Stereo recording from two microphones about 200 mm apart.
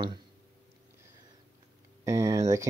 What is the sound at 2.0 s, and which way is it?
Speech, 15° right (ahead or behind).